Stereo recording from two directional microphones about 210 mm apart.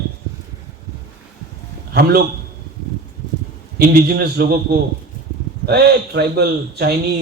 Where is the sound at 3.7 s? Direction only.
45° right (ahead or behind).